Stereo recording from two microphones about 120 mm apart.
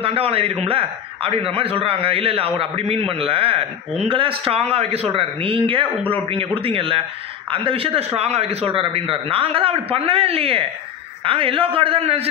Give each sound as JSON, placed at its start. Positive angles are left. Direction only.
{"t": 0.0, "sound": "a man's voice", "side_deg": -50}